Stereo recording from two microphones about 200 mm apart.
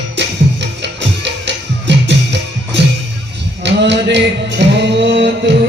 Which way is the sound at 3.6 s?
60° right (ahead or behind).